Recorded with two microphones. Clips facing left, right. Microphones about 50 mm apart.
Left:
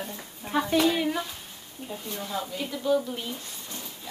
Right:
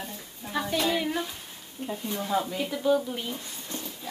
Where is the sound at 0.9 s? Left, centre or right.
Centre.